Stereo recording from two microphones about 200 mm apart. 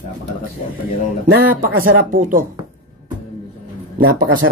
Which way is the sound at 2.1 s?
45° right (ahead or behind).